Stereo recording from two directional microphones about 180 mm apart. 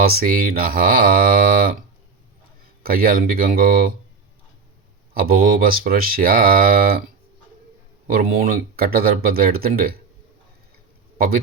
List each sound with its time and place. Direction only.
0.0 s speech: 55° right (ahead or behind)
2.8 s speech: 55° right (ahead or behind)
5.1 s speech: 55° right (ahead or behind)
8.1 s speech: 55° right (ahead or behind)